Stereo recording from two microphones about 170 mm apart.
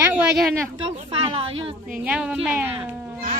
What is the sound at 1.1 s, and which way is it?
Speech, 35° right (ahead or behind).